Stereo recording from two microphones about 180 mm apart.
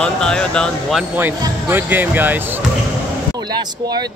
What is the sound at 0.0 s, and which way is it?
Speech, 5° left (ahead or behind).